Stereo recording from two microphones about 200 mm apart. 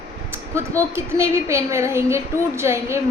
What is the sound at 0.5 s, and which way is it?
A woman's voice, 15° right (ahead or behind).